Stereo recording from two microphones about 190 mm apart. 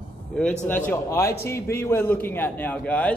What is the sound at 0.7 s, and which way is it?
A man's voice, 10° left (ahead or behind).